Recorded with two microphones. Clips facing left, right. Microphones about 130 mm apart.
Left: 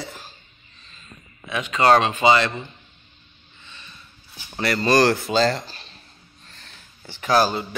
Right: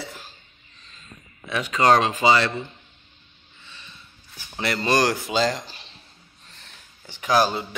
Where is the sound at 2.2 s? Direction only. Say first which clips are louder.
Left 2 dB; 20° left (ahead or behind).